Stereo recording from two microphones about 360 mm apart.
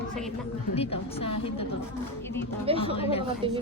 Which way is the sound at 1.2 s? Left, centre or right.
Centre.